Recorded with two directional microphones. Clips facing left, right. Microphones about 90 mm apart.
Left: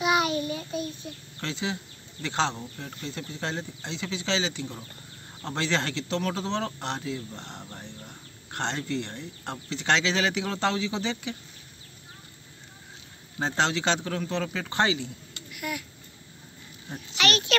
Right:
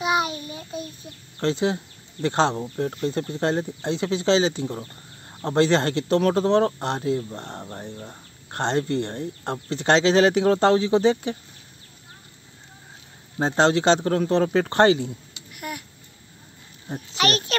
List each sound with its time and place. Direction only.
0.0 s child singing: 25° right (ahead or behind)
1.4 s speech: 40° right (ahead or behind)
13.6 s speech: 40° right (ahead or behind)
16.9 s speech: 35° right (ahead or behind)